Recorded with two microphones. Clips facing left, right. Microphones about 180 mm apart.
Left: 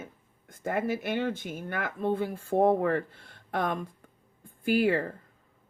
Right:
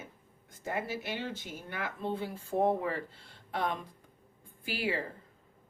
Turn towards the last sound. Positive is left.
turn(degrees=55)  # may be behind; listen again after turning